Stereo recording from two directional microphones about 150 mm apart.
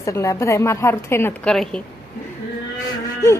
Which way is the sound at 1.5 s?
5° left (ahead or behind).